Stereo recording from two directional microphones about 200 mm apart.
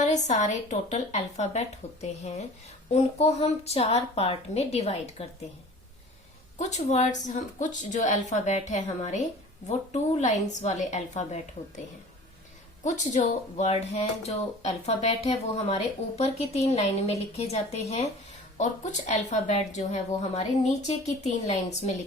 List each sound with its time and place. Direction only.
0.0 s speech: 35° left (ahead or behind)
6.6 s speech: 35° left (ahead or behind)
12.8 s speech: 35° left (ahead or behind)